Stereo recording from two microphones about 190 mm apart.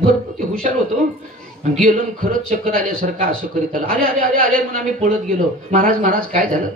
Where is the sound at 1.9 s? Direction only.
50° right (ahead or behind).